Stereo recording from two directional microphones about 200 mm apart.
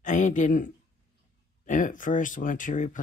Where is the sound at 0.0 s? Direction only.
40° left (ahead or behind).